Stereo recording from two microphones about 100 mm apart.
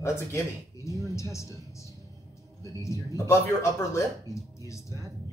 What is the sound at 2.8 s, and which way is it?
Speech, 30° left (ahead or behind).